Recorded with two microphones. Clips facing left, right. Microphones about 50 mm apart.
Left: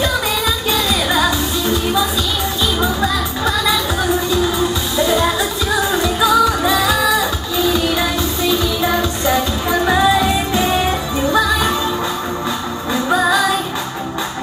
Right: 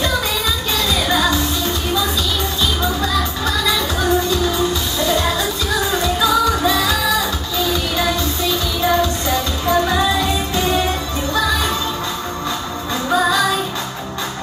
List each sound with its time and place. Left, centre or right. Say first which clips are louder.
1.0 s music: left 1 dB; centre
5.0 s music: left 2 dB; centre
12.9 s music: left 2 dB; centre